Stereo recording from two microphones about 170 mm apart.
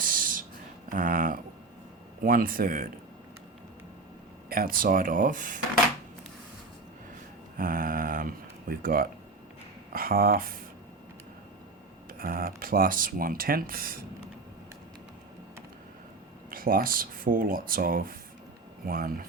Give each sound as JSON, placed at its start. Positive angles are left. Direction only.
{"t": 0.0, "sound": "a sound", "side_deg": -55}
{"t": 0.9, "sound": "speech", "side_deg": -55}
{"t": 4.4, "sound": "speech", "side_deg": -60}
{"t": 7.5, "sound": "speech", "side_deg": -55}
{"t": 12.2, "sound": "speech", "side_deg": -55}
{"t": 16.5, "sound": "speech", "side_deg": -60}